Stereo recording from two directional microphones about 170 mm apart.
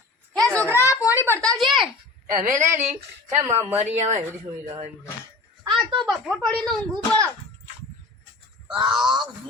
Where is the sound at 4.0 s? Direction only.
40° right (ahead or behind).